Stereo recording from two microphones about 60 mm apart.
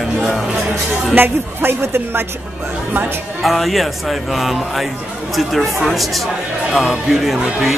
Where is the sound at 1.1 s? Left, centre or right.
Right.